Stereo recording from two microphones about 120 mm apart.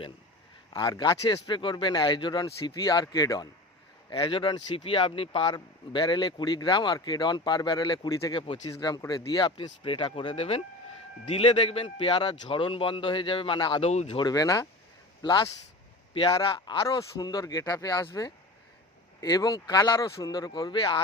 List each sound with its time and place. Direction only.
0.7 s speech: 35° left (ahead or behind)
4.1 s a man's voice: 45° left (ahead or behind)
5.5 s speech: 40° left (ahead or behind)
9.6 s a man's voice: 45° left (ahead or behind)
13.8 s speech: 60° left (ahead or behind)
14.2 s a man's voice: 30° left (ahead or behind)
16.8 s speech: 30° left (ahead or behind)